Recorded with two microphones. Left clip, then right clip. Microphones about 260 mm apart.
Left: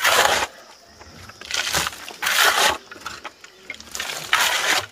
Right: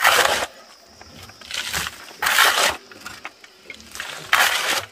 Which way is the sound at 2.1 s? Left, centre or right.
Centre.